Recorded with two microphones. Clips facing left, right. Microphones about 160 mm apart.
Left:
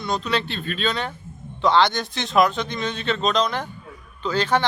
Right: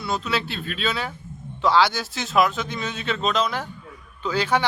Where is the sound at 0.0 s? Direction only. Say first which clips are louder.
Left 2 dB; 5° right (ahead or behind).